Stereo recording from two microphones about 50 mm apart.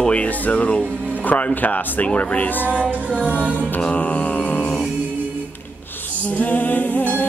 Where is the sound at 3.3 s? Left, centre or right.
Left.